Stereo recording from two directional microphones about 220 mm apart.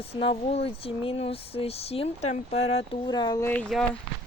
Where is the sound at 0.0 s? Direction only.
25° left (ahead or behind); by 3.8 s 5° left (ahead or behind).